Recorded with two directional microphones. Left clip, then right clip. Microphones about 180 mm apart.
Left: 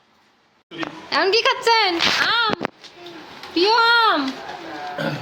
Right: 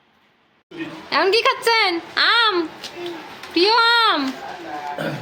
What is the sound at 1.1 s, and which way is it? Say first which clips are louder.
Speech: right 1 dB; 5° right (ahead or behind).